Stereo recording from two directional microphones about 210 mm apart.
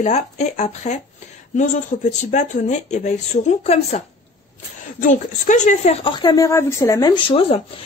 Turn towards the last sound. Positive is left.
turn(degrees=25)  # may be behind; listen again after turning